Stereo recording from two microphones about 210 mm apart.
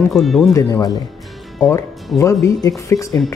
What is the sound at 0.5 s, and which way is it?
Speech, 15° left (ahead or behind).